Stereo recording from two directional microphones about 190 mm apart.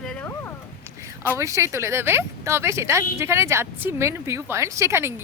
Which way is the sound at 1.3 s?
15° right (ahead or behind).